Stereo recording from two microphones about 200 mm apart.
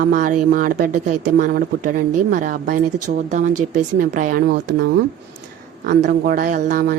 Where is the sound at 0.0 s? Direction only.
40° right (ahead or behind).